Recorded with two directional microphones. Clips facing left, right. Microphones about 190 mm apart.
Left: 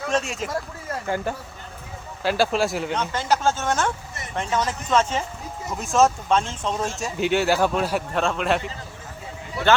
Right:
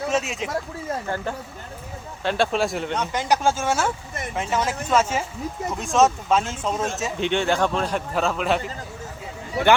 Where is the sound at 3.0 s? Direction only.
15° right (ahead or behind).